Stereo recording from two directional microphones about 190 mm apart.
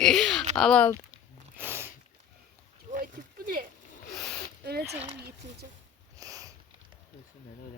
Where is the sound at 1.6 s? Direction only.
10° right (ahead or behind).